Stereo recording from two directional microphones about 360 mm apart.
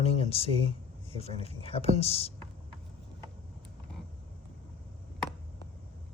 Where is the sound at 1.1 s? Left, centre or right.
Centre.